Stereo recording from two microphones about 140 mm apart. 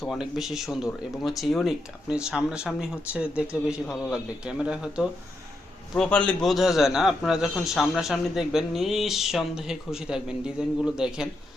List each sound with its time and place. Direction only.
0.0 s a man's voice: centre (ahead or behind)
6.0 s a man's voice: 5° left (ahead or behind)